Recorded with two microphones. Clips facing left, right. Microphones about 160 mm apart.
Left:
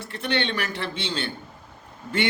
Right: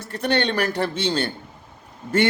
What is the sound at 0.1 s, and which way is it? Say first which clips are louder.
Speech: right 5 dB; 40° right (ahead or behind).